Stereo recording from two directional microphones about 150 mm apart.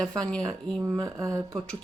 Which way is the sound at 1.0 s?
20° right (ahead or behind).